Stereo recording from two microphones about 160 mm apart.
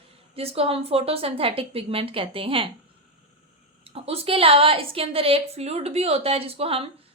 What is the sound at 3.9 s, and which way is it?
A woman's voice, 40° right (ahead or behind).